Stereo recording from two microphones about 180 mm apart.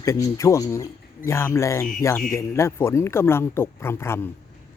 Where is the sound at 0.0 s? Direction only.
15° left (ahead or behind).